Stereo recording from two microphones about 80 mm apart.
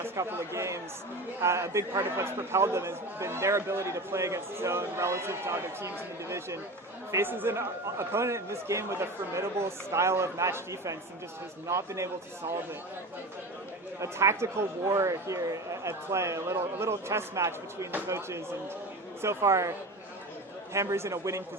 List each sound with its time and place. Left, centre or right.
0.0 s a man's voice: right
14.0 s a man's voice: right
20.7 s a man's voice: right